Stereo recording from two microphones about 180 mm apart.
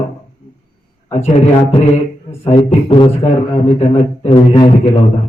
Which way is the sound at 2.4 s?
30° left (ahead or behind).